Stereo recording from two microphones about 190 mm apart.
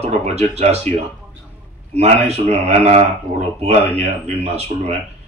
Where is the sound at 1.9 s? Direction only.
35° right (ahead or behind).